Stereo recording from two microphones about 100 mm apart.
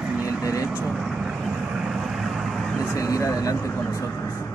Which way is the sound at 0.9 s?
5° right (ahead or behind).